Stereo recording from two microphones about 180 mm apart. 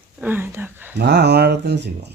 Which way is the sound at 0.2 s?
10° right (ahead or behind).